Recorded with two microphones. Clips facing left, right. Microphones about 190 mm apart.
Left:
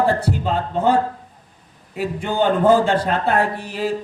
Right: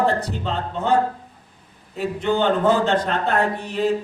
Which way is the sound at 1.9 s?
10° left (ahead or behind).